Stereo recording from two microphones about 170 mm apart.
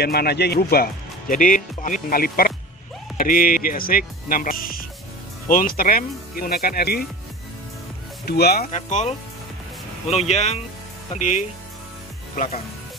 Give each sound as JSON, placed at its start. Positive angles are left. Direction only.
{"t": 0.0, "sound": "speech", "side_deg": 70}
{"t": 1.3, "sound": "speech", "side_deg": 50}
{"t": 8.3, "sound": "speech", "side_deg": 65}
{"t": 8.6, "sound": "speech", "side_deg": 45}